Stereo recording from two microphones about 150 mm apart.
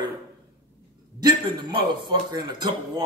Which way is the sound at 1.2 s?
30° right (ahead or behind).